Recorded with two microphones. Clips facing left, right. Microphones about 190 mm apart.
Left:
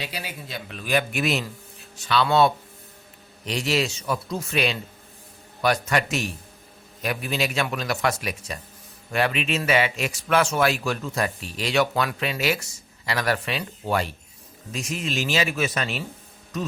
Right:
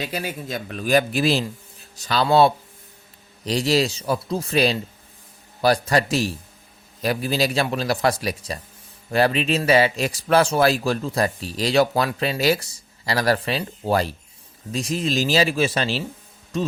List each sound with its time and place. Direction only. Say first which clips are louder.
0.0 s speech: right 6 dB; 45° right (ahead or behind); by 16.0 s 30° right (ahead or behind)
16.5 s music: right 5 dB; 30° right (ahead or behind)